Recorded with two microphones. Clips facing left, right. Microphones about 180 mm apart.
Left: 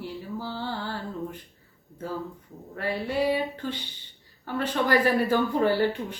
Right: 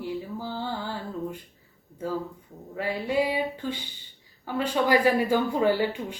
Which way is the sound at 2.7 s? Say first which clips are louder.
Right 2 dB; 15° right (ahead or behind).